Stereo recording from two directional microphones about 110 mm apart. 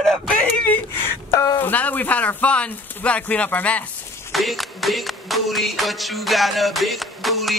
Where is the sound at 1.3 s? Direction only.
35° left (ahead or behind).